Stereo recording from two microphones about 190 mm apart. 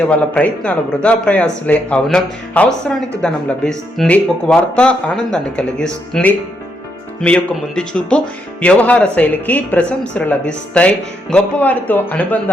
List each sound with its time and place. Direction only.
0.1 s a man's voice: 5° left (ahead or behind)